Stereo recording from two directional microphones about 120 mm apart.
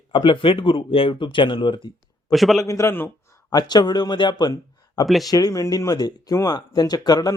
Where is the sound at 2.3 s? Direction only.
Centre (ahead or behind).